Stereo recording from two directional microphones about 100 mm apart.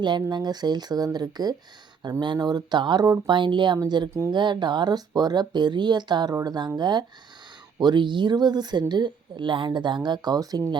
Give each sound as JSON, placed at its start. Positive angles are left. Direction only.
{"t": 0.0, "sound": "a woman's voice", "side_deg": -45}